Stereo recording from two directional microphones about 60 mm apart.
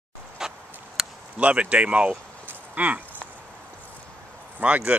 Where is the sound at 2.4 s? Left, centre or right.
Right.